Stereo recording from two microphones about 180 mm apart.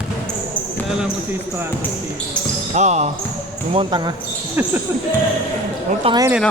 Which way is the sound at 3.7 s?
25° right (ahead or behind).